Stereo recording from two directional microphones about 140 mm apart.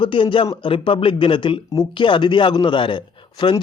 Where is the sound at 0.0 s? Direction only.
35° left (ahead or behind).